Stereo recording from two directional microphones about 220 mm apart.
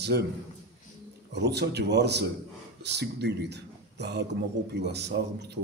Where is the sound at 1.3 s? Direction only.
50° right (ahead or behind).